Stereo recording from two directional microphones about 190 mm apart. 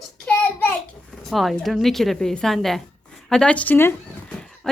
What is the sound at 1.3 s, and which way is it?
A woman's voice, centre (ahead or behind).